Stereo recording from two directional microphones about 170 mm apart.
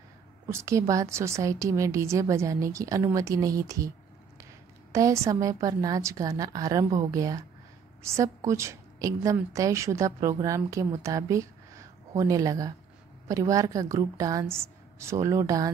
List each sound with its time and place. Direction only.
0.5 s speech: 15° right (ahead or behind)
4.9 s a woman's voice: 20° right (ahead or behind)